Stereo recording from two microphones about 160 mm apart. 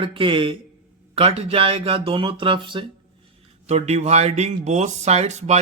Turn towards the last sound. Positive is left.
turn(degrees=-45)  # may be behind; listen again after turning